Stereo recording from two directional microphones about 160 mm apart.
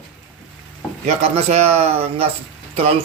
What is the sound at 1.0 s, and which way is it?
Speech, 40° right (ahead or behind).